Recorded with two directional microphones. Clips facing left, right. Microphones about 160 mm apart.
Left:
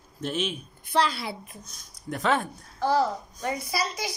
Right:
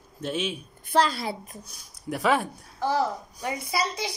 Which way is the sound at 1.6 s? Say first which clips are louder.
Right 3 dB; 10° right (ahead or behind).